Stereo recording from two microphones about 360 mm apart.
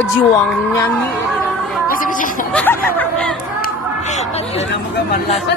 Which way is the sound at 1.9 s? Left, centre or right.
Left.